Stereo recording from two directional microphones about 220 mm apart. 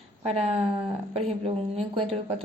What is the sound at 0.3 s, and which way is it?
A woman's voice, 30° right (ahead or behind).